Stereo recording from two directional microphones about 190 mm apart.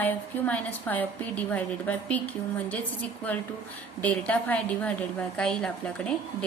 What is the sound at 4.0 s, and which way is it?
A woman's voice, 5° left (ahead or behind).